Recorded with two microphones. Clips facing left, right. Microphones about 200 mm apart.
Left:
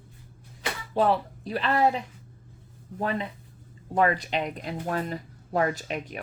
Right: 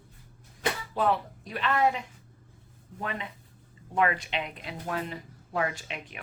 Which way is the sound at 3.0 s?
35° left (ahead or behind).